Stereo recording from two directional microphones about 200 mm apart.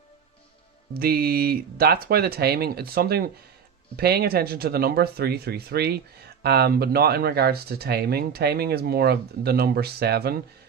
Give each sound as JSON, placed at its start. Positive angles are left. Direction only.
{"t": 0.9, "sound": "speech", "side_deg": -50}